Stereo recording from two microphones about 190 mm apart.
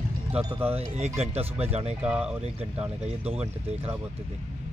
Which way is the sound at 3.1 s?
35° right (ahead or behind).